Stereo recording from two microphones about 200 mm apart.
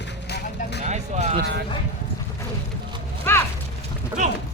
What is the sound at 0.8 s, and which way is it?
Music, 35° right (ahead or behind).